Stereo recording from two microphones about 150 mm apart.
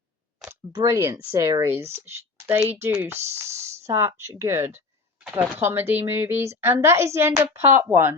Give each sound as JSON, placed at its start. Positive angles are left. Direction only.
{"t": 0.7, "sound": "speech", "side_deg": -20}